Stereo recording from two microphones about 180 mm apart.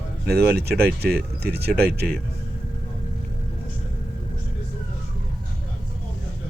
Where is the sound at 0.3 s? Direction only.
60° right (ahead or behind).